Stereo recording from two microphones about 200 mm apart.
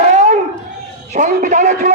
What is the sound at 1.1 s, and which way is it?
Speech, 40° right (ahead or behind).